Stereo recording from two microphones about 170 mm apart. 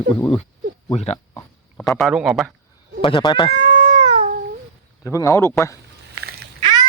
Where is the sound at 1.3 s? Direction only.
15° left (ahead or behind).